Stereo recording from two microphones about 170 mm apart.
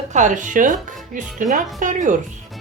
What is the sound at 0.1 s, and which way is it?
Speech, 45° right (ahead or behind).